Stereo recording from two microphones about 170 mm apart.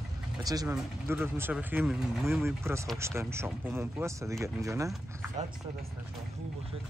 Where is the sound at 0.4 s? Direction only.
20° right (ahead or behind).